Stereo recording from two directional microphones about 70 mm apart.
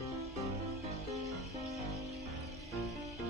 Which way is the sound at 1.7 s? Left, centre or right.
Centre.